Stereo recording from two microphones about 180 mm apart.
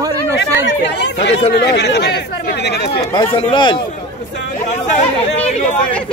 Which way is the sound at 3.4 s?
25° left (ahead or behind).